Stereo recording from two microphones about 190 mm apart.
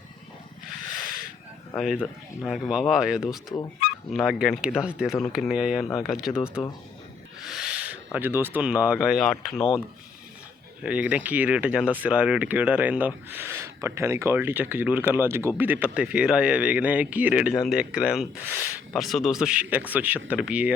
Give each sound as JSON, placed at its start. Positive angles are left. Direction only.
{"t": 1.7, "sound": "speech", "side_deg": 0}
{"t": 3.3, "sound": "speech", "side_deg": 20}
{"t": 4.1, "sound": "speech", "side_deg": 0}
{"t": 7.4, "sound": "speech", "side_deg": 0}
{"t": 10.8, "sound": "speech", "side_deg": -5}